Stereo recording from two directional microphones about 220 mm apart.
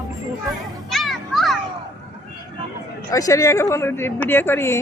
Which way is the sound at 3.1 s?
15° left (ahead or behind).